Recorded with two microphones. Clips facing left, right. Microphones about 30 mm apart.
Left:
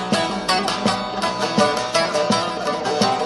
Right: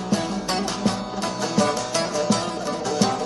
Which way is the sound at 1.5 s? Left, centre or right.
Left.